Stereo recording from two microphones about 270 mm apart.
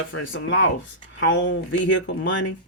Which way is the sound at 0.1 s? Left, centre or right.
Left.